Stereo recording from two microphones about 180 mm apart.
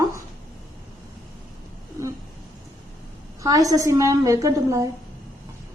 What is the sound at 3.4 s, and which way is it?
A woman's voice, 20° right (ahead or behind).